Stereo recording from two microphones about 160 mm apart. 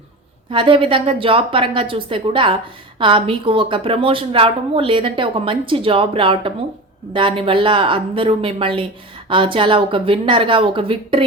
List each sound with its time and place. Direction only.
0.5 s a woman's voice: 30° right (ahead or behind)